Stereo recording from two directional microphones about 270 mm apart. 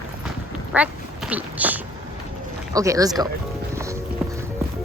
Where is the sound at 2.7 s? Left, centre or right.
Centre.